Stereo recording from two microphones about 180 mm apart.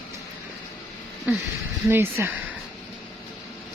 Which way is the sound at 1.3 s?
10° right (ahead or behind).